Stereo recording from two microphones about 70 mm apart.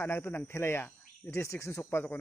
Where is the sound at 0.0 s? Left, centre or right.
Left.